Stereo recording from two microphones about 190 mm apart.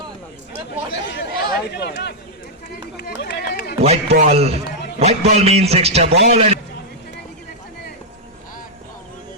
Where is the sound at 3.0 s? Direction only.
60° left (ahead or behind).